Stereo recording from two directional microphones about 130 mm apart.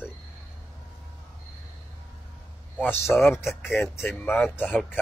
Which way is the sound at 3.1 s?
15° left (ahead or behind).